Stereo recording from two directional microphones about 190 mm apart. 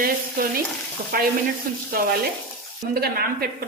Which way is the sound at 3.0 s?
55° right (ahead or behind).